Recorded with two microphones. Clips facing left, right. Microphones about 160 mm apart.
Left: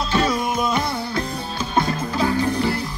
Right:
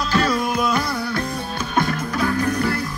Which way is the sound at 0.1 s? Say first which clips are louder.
Right 1 dB; 25° left (ahead or behind).